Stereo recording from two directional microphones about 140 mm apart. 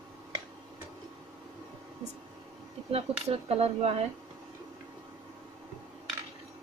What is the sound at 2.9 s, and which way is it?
Speech, 45° right (ahead or behind).